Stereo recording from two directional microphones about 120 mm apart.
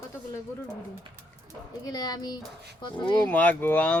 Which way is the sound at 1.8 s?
35° left (ahead or behind).